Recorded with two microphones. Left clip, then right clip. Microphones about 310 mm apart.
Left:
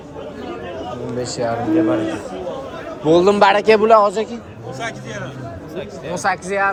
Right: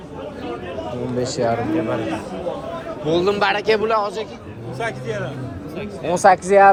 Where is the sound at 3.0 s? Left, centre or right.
Left.